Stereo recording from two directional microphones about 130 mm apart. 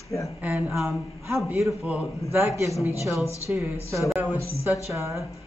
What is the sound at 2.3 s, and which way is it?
A woman's voice, 20° right (ahead or behind).